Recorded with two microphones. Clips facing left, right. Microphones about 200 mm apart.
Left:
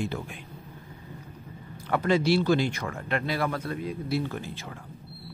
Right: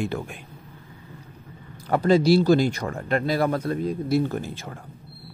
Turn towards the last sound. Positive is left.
turn(degrees=-45)  # may be behind; listen again after turning